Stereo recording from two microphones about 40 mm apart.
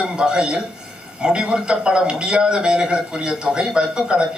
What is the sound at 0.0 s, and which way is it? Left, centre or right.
A man's voice, right.